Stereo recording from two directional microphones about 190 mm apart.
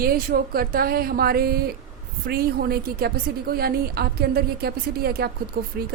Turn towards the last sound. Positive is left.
turn(degrees=-55)  # may be behind; listen again after turning